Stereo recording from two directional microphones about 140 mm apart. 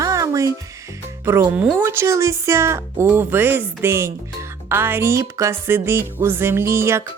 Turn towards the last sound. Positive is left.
turn(degrees=-20)  # may be behind; listen again after turning